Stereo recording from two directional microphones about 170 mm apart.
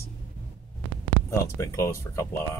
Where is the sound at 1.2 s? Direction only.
15° left (ahead or behind).